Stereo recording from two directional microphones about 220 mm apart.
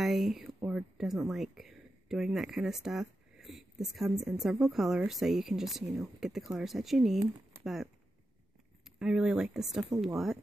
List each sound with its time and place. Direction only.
0.0 s speech: centre (ahead or behind)
9.0 s speech: 5° right (ahead or behind)